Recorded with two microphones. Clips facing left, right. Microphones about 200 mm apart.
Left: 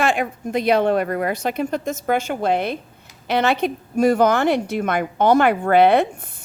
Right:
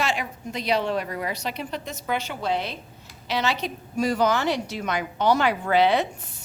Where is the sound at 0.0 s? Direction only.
55° left (ahead or behind).